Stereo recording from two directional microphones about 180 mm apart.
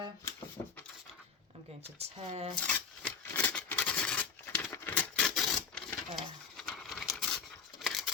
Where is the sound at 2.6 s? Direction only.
10° left (ahead or behind).